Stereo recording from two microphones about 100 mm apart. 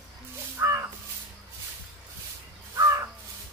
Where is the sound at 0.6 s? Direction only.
25° right (ahead or behind).